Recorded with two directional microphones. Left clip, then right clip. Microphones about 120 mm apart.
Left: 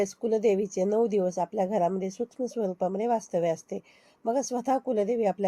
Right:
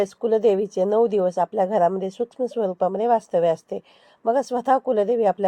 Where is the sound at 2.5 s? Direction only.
10° right (ahead or behind).